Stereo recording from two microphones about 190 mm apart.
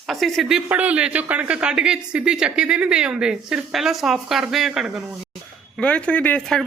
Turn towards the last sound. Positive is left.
turn(degrees=5)  # may be behind; listen again after turning